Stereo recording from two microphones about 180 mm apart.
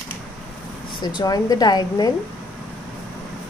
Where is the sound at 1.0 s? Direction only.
20° left (ahead or behind).